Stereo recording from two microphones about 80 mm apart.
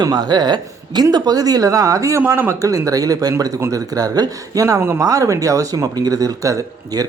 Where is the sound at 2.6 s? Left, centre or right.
Right.